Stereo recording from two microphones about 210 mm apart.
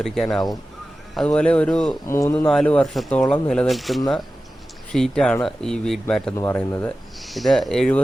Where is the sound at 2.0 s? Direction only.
15° left (ahead or behind).